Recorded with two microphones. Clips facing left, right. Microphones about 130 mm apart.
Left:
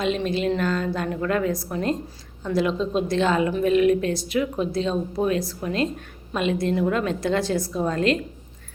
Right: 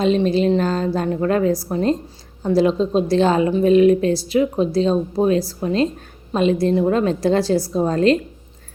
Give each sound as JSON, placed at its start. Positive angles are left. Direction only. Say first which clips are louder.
{"t": 0.0, "sound": "a woman's voice", "louder": "right 7 dB", "side_deg": -35}